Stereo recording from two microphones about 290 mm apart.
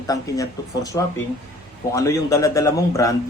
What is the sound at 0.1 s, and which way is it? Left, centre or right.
A man's voice, centre.